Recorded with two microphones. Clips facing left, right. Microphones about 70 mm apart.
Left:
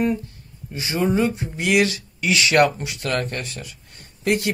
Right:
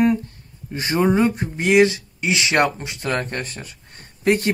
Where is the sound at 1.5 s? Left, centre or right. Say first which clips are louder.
Right 4 dB; right.